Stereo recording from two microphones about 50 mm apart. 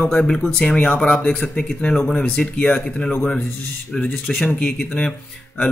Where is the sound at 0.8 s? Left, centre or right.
Left.